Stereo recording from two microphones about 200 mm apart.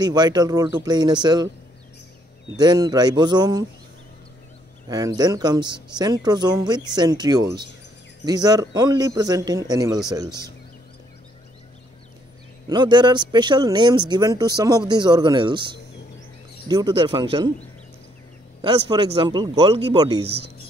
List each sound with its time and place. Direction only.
0.0 s speech: 20° right (ahead or behind)
2.5 s speech: 20° right (ahead or behind)
4.8 s speech: 20° right (ahead or behind)
12.6 s speech: 20° right (ahead or behind)
16.6 s speech: 20° right (ahead or behind)
18.6 s speech: 25° right (ahead or behind)